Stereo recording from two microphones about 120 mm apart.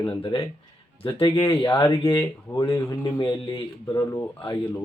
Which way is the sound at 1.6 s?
40° left (ahead or behind).